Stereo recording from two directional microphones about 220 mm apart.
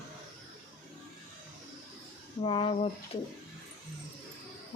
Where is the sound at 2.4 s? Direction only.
25° left (ahead or behind).